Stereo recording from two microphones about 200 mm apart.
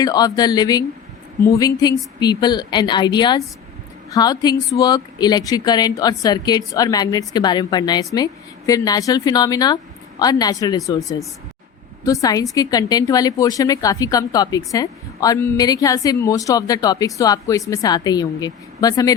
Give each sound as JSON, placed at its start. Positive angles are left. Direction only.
{"t": 0.0, "sound": "a woman's voice", "side_deg": 20}